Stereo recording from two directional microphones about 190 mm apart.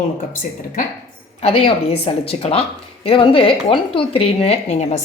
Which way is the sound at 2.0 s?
30° left (ahead or behind).